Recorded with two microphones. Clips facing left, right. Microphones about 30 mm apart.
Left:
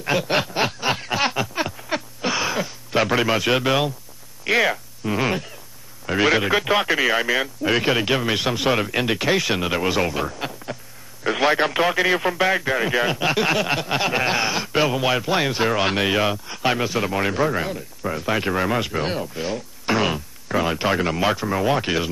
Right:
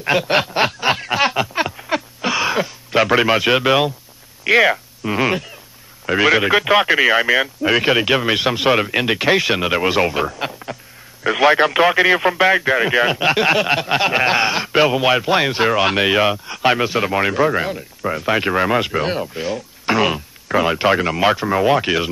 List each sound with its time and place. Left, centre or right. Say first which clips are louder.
0.0 s speech: right 4 dB; centre
0.8 s snicker: right 5 dB; centre
1.3 s a sound: right 5 dB; right
3.2 s speech: right 4 dB; right
5.2 s speech: right 7 dB; centre
6.4 s speech: right 5 dB; centre
11.2 s a man's voice: right 5 dB; centre
11.7 s speech: right 5 dB; centre
15.7 s speech: right 4 dB; centre
19.4 s speech: right 3 dB; centre